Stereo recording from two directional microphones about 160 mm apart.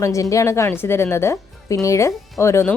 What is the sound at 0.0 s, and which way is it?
A woman's voice, 20° left (ahead or behind).